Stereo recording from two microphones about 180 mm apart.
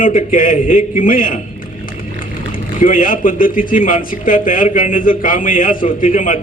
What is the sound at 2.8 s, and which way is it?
A man's voice, 50° left (ahead or behind).